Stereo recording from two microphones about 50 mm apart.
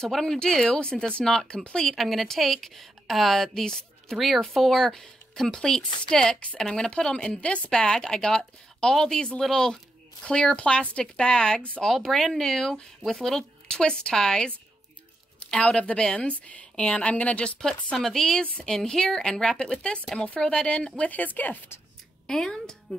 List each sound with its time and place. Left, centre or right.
0.1 s speech: centre
2.0 s a woman's voice: centre
7.2 s speech: left
7.8 s speech: centre
10.2 s speech: centre
11.8 s speech: centre
15.5 s speech: left
16.3 s speech: left
18.0 s speech: centre
21.1 s speech: left
22.2 s a woman's voice: centre